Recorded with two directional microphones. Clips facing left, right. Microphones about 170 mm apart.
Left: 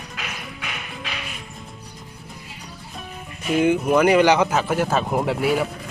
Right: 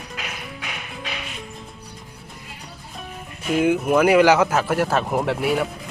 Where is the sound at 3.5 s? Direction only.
5° right (ahead or behind).